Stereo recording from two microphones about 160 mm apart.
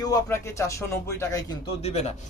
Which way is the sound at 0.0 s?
20° left (ahead or behind).